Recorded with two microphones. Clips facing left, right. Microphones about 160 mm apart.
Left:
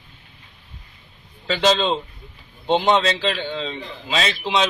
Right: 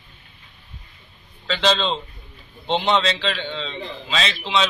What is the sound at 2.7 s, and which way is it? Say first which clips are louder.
Speech: left 3 dB; 10° left (ahead or behind).